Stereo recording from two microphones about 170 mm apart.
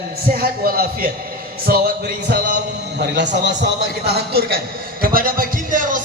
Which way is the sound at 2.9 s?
90° right.